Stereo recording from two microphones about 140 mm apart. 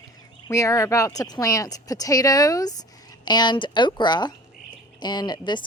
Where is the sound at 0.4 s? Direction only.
20° left (ahead or behind).